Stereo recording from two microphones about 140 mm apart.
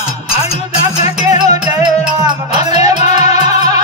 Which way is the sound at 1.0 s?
50° left (ahead or behind).